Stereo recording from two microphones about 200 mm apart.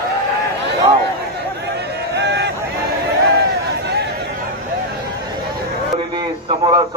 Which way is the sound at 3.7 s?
55° right (ahead or behind).